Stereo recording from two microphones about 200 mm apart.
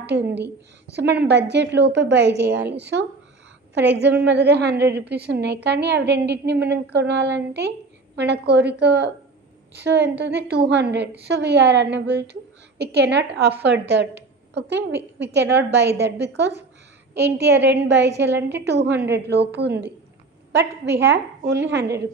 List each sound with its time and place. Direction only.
0.0 s a woman's voice: 55° right (ahead or behind)